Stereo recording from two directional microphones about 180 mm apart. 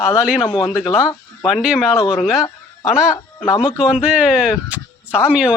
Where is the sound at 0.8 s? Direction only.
5° right (ahead or behind).